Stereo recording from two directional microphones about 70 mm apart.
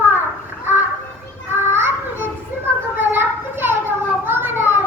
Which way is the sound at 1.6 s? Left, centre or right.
Right.